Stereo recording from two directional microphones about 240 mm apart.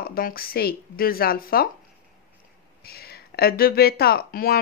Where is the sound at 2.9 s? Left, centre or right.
Left.